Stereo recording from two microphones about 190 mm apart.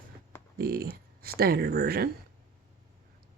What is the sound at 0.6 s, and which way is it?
Speech, 50° right (ahead or behind).